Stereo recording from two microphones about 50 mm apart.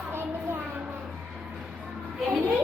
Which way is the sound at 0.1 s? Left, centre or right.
Right.